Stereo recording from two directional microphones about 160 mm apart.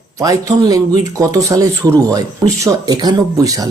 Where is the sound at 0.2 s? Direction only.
20° right (ahead or behind).